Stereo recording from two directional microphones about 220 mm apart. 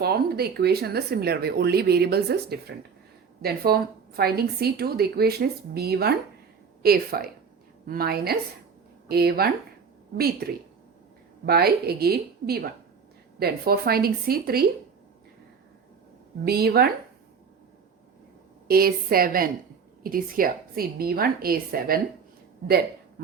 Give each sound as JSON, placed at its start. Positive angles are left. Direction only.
{"t": 0.0, "sound": "a woman's voice", "side_deg": -45}
{"t": 16.5, "sound": "a woman's voice", "side_deg": -45}
{"t": 18.7, "sound": "a woman's voice", "side_deg": -45}